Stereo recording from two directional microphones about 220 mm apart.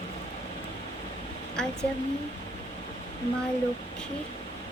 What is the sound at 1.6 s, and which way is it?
Speech, 5° left (ahead or behind).